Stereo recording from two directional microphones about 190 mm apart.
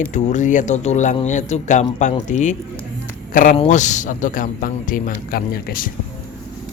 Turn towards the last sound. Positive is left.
turn(degrees=50)  # may be behind; listen again after turning